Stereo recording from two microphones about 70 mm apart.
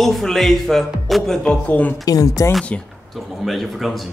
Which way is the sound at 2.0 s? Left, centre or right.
Left.